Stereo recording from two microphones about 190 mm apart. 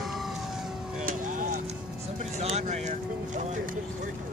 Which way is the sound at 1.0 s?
40° right (ahead or behind).